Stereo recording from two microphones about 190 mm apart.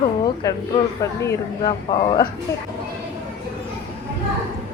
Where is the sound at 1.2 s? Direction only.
20° left (ahead or behind).